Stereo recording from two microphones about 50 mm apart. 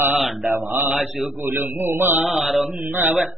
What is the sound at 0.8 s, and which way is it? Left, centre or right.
Mantra, right.